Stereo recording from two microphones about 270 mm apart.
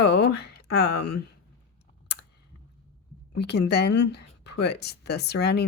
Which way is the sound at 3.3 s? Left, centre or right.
Left.